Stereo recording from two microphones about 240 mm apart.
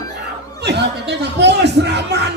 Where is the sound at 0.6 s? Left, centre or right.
Right.